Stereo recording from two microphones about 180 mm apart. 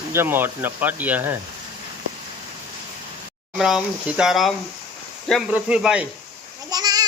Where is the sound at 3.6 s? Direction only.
Centre (ahead or behind).